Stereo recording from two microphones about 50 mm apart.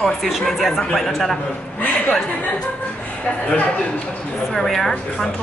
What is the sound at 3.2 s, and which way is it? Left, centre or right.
Speech, centre.